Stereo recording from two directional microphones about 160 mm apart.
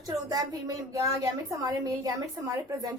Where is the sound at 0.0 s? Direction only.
25° right (ahead or behind).